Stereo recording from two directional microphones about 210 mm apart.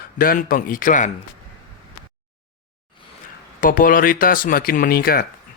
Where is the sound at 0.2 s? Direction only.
45° left (ahead or behind).